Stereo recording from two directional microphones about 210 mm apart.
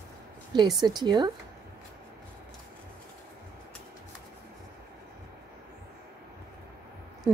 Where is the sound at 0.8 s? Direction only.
20° right (ahead or behind).